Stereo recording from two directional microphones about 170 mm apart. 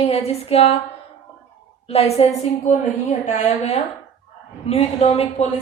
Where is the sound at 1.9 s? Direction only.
35° left (ahead or behind).